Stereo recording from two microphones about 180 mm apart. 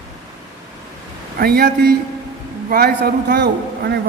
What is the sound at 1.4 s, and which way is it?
A man's voice, 60° right (ahead or behind).